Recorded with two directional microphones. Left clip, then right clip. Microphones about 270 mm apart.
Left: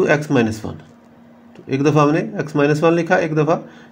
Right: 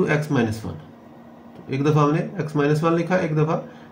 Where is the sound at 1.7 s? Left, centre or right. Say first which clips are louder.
Left 5 dB; left.